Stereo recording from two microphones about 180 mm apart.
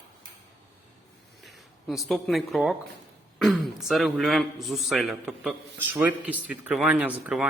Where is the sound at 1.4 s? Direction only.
Centre (ahead or behind).